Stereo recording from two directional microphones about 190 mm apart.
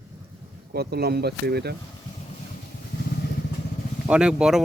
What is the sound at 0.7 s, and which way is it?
Speech, 55° right (ahead or behind).